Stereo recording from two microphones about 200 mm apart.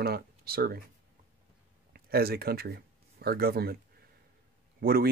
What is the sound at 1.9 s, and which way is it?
Speech, 50° right (ahead or behind).